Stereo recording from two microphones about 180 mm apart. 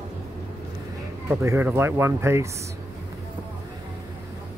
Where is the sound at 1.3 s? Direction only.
15° right (ahead or behind).